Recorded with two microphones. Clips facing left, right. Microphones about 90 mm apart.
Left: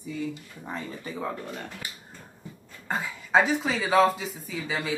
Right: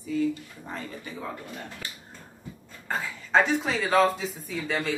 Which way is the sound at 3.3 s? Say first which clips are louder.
Even; centre (ahead or behind).